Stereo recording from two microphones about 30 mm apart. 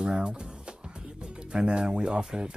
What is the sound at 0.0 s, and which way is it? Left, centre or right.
Speech, right.